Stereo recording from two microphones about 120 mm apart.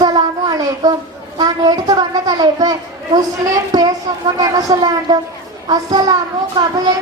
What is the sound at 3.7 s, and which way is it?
A child's voice, 35° right (ahead or behind).